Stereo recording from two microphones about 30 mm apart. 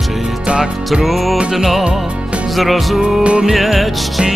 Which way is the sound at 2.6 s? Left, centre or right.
Centre.